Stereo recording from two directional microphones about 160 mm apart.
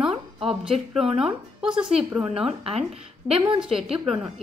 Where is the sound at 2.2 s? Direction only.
35° right (ahead or behind).